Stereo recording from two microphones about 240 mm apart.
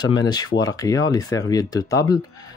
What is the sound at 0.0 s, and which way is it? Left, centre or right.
Speech, centre.